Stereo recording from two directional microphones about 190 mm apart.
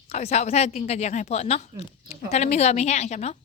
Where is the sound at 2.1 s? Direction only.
35° left (ahead or behind).